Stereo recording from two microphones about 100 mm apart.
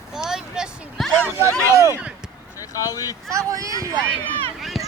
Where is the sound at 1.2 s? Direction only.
25° right (ahead or behind).